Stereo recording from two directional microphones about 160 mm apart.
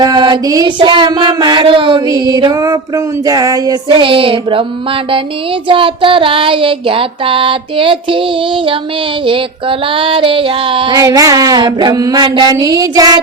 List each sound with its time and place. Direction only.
0.0 s child singing: 30° right (ahead or behind)
5.6 s child singing: 30° right (ahead or behind)
9.2 s child singing: 35° right (ahead or behind)
10.9 s child singing: 20° right (ahead or behind)